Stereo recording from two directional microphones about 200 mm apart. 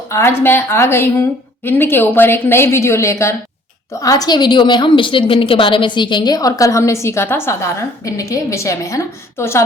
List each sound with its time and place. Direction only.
0.1 s a woman's voice: 15° left (ahead or behind)